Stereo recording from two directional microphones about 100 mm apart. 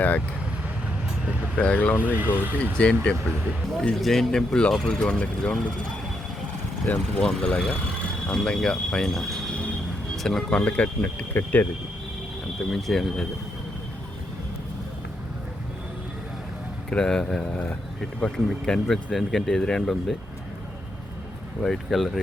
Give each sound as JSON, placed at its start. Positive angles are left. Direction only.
{"t": 1.5, "sound": "speech", "side_deg": 15}
{"t": 2.1, "sound": "speech", "side_deg": -15}
{"t": 2.7, "sound": "speech", "side_deg": 10}
{"t": 6.8, "sound": "speech", "side_deg": 10}
{"t": 12.7, "sound": "speech", "side_deg": 5}
{"t": 16.9, "sound": "speech", "side_deg": 5}
{"t": 21.6, "sound": "speech", "side_deg": 0}